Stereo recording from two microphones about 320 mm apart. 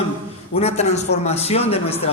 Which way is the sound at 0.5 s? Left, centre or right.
Centre.